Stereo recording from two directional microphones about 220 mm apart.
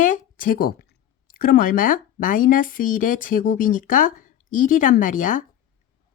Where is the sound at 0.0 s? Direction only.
35° left (ahead or behind).